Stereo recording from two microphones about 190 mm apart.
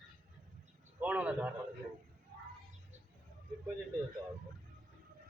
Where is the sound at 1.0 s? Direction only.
10° right (ahead or behind).